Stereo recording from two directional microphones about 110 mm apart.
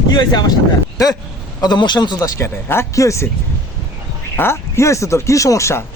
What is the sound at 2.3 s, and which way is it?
Speech, 20° left (ahead or behind).